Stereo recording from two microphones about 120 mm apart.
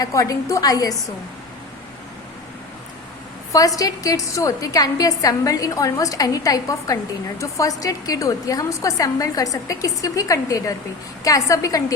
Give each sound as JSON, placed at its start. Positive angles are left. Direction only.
{"t": 0.0, "sound": "a woman's voice", "side_deg": 30}
{"t": 3.8, "sound": "a woman's voice", "side_deg": 30}